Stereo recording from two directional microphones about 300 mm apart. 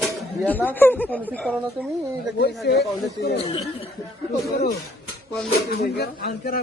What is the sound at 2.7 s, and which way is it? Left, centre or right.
Speech, left.